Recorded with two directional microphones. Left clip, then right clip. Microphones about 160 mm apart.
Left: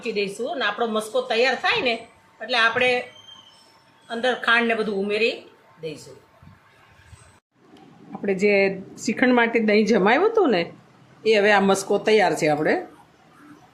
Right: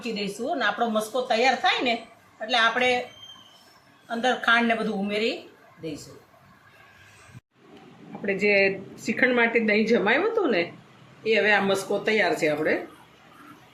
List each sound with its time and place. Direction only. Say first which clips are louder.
0.0 s a woman's voice: left 4 dB; 20° left (ahead or behind)
4.1 s a woman's voice: left 2 dB; 25° left (ahead or behind)
8.2 s speech: left 2 dB; 75° left (ahead or behind); by 12.8 s 90° left